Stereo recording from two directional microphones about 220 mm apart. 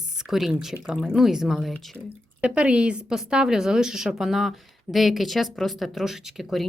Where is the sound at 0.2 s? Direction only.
Centre (ahead or behind).